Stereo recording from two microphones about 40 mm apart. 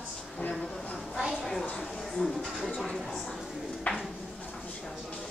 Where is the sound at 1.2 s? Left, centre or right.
Centre.